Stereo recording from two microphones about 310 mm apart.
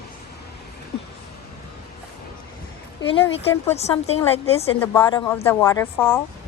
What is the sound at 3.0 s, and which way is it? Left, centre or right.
Speech, centre.